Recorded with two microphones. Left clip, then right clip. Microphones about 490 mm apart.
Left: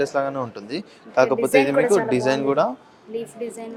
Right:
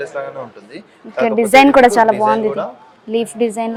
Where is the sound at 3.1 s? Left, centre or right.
Right.